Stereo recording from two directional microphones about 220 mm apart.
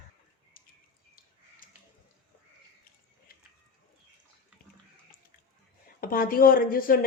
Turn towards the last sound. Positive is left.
turn(degrees=40)  # may be behind; listen again after turning